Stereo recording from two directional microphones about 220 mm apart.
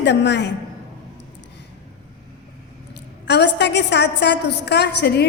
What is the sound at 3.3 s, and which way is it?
A woman's voice, 50° left (ahead or behind).